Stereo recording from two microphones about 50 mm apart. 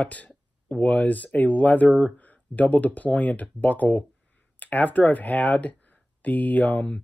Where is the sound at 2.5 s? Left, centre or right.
Left.